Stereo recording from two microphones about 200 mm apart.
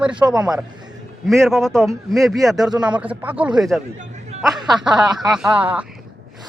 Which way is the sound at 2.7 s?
20° right (ahead or behind).